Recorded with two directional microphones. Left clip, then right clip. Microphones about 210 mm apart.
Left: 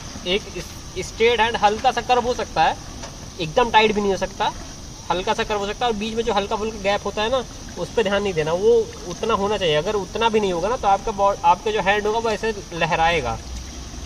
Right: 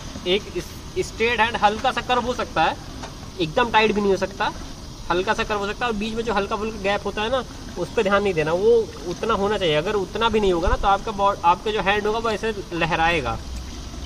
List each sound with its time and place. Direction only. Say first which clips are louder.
0.9 s speech: left 2 dB; centre (ahead or behind)